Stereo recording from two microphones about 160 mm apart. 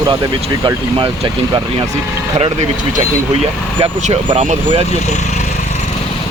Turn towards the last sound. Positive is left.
turn(degrees=-45)  # may be behind; listen again after turning